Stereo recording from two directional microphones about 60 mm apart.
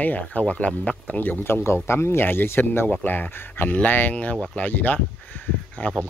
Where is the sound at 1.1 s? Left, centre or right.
Left.